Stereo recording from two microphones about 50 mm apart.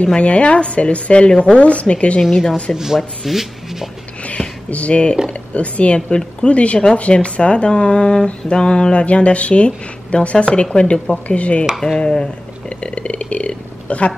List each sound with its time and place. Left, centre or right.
0.0 s speech: left
2.7 s speech: centre
4.6 s speech: left
12.0 s burping: centre